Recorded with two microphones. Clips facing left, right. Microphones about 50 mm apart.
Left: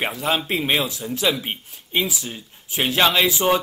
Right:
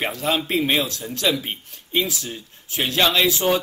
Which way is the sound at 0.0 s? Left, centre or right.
Centre.